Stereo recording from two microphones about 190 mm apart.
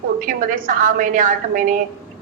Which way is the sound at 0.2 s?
45° right (ahead or behind).